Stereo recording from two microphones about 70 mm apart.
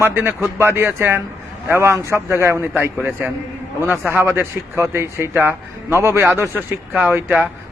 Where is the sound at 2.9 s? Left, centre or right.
Right.